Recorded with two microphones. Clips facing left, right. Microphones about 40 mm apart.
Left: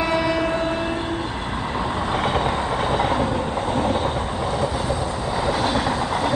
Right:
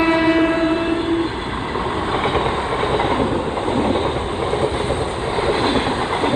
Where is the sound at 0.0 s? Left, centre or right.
Right.